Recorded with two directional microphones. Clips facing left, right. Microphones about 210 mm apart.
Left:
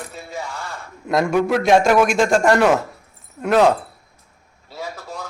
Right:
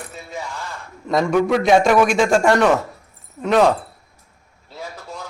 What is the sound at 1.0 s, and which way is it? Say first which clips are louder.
A man's voice: right 1 dB; 10° left (ahead or behind).